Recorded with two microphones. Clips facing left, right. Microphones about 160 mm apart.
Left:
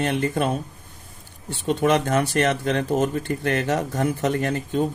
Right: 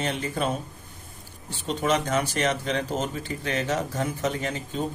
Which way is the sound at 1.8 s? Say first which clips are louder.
Left 4 dB; 60° left (ahead or behind).